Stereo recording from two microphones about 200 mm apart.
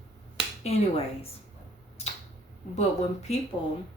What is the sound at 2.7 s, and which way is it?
Speech, 35° left (ahead or behind).